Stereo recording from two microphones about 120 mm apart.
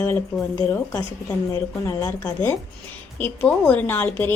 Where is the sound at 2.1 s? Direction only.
20° left (ahead or behind).